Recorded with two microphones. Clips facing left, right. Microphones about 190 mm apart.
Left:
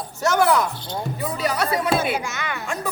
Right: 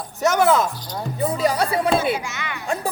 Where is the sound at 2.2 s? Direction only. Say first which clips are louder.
Left 2 dB; 45° left (ahead or behind).